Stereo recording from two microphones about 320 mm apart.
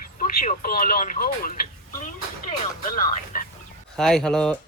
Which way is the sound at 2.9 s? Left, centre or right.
Left.